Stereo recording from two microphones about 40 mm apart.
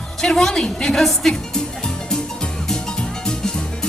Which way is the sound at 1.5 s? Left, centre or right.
Centre.